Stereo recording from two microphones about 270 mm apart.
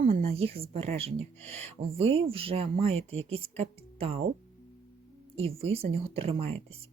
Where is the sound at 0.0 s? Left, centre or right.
Right.